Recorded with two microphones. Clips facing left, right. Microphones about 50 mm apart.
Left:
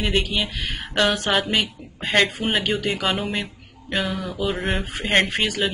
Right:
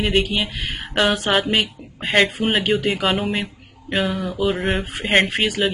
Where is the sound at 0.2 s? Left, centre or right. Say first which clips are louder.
Right 3 dB; centre.